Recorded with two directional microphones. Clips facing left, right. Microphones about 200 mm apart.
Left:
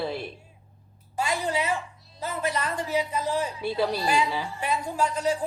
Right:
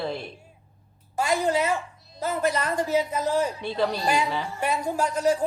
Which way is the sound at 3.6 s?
5° left (ahead or behind).